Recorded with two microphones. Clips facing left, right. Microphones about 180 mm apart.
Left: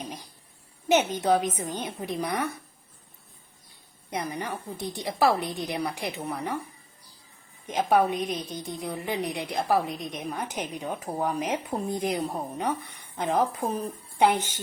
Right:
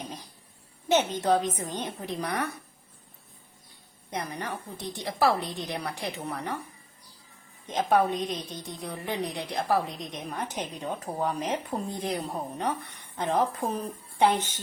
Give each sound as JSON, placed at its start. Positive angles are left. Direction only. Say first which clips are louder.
{"t": 0.9, "sound": "a woman's voice", "louder": "left 1 dB", "side_deg": 10}
{"t": 4.1, "sound": "a woman's voice", "louder": "left 2 dB", "side_deg": 10}
{"t": 7.7, "sound": "a woman's voice", "louder": "left 1 dB", "side_deg": 10}
{"t": 14.2, "sound": "a woman's voice", "louder": "left 1 dB", "side_deg": 15}